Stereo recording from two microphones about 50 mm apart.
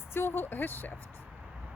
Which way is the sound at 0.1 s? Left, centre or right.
Left.